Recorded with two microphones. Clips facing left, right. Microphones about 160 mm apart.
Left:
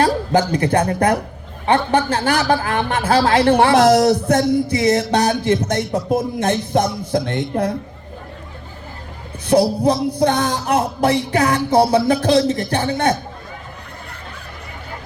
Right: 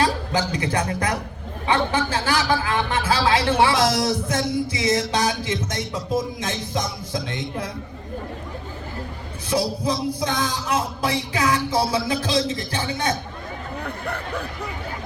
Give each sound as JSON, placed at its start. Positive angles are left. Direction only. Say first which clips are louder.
{"t": 0.0, "sound": "a man's voice", "louder": "left 6 dB", "side_deg": 55}
{"t": 9.5, "sound": "a man's voice", "louder": "left 8 dB", "side_deg": 60}